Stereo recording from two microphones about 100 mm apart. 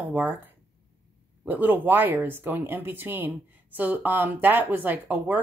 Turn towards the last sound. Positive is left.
turn(degrees=-15)  # may be behind; listen again after turning